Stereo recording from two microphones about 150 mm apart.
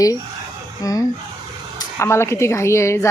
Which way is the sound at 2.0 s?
15° left (ahead or behind).